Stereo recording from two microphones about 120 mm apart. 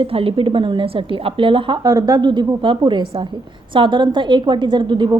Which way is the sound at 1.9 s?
35° right (ahead or behind).